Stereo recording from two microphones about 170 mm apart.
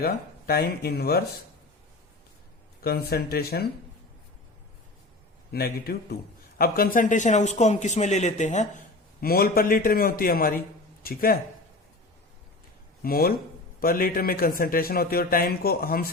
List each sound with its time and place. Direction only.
0.0 s a man's voice: 65° left (ahead or behind)
2.8 s a man's voice: 65° left (ahead or behind)
5.5 s a man's voice: 65° left (ahead or behind); by 8.8 s 45° left (ahead or behind)
9.2 s a man's voice: 60° left (ahead or behind)
13.0 s a man's voice: 60° left (ahead or behind)